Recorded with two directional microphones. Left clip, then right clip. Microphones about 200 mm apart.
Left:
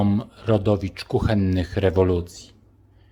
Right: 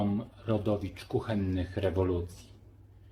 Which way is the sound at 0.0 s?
45° left (ahead or behind).